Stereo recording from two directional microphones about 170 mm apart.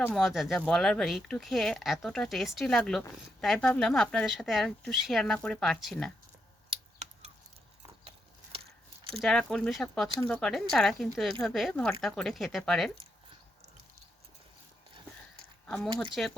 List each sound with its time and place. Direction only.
0.1 s speech: centre (ahead or behind)
6.7 s scissors: 40° right (ahead or behind)
9.2 s speech: 5° left (ahead or behind)
15.6 s speech: centre (ahead or behind)